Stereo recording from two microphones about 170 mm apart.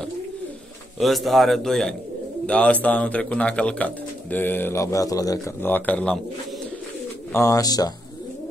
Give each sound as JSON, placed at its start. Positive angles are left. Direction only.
{"t": 0.9, "sound": "a man's voice", "side_deg": 0}
{"t": 7.3, "sound": "speech", "side_deg": 20}